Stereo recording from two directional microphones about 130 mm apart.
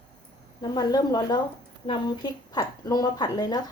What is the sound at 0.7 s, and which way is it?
Speech, 30° left (ahead or behind).